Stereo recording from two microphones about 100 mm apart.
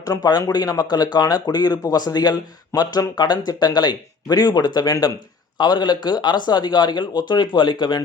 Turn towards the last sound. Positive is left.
turn(degrees=50)  # may be behind; listen again after turning